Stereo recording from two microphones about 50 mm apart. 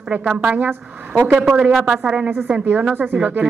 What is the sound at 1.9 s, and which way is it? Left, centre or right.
Speech, centre.